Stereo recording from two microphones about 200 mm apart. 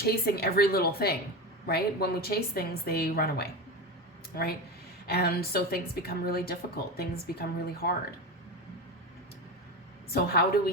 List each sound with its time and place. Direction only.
0.0 s a woman's voice: 50° left (ahead or behind)
10.1 s a woman's voice: 50° left (ahead or behind)